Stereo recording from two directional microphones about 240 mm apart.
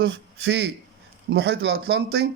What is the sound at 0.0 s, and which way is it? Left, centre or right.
A man's voice, right.